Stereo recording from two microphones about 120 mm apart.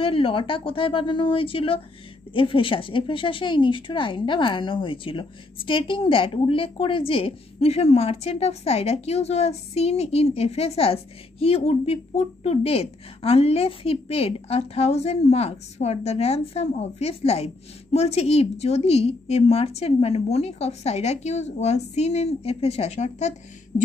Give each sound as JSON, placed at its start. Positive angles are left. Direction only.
{"t": 0.0, "sound": "a woman's voice", "side_deg": 50}